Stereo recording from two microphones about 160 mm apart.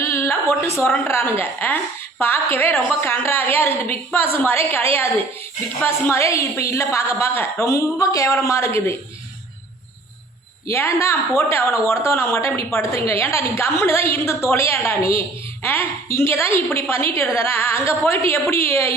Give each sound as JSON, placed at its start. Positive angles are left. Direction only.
{"t": 0.0, "sound": "a sound", "side_deg": 15}
{"t": 0.8, "sound": "a woman's voice", "side_deg": 15}
{"t": 10.7, "sound": "a woman's voice", "side_deg": 15}